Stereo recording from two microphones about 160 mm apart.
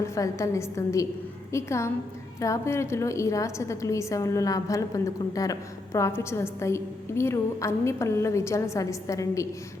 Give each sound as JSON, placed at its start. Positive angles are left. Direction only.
{"t": 0.0, "sound": "a woman's voice", "side_deg": 20}